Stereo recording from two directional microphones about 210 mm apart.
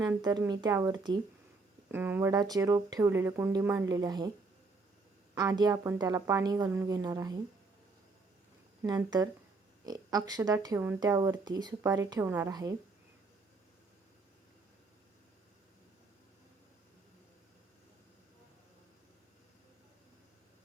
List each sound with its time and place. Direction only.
0.0 s speech: 20° right (ahead or behind)
5.3 s speech: 15° right (ahead or behind)
8.8 s speech: 15° right (ahead or behind)